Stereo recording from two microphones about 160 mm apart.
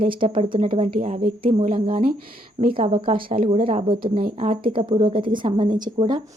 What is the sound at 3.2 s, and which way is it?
Speech, 60° right (ahead or behind).